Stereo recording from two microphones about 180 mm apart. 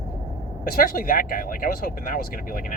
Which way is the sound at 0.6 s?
55° left (ahead or behind).